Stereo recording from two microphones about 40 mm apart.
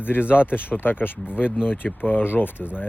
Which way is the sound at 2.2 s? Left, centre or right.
Left.